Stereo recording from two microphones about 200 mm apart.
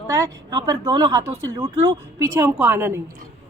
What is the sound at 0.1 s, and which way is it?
Speech, 15° right (ahead or behind).